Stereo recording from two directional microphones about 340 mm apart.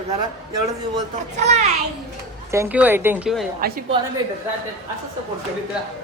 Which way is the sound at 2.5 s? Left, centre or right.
Centre.